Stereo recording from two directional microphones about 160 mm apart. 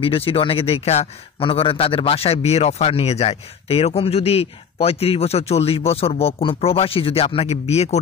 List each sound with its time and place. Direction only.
0.0 s a man's voice: 35° left (ahead or behind)